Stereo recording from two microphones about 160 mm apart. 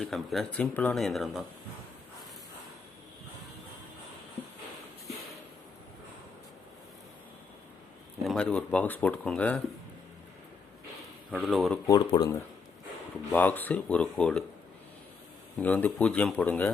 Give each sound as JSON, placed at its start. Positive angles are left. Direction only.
{"t": 0.0, "sound": "speech", "side_deg": 0}
{"t": 8.2, "sound": "speech", "side_deg": 5}
{"t": 11.3, "sound": "speech", "side_deg": -5}
{"t": 11.9, "sound": "speech", "side_deg": 25}
{"t": 13.3, "sound": "speech", "side_deg": 10}
{"t": 15.5, "sound": "speech", "side_deg": 10}